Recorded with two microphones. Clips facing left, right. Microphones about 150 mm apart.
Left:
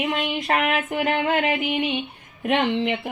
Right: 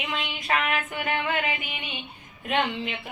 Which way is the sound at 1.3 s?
75° left (ahead or behind).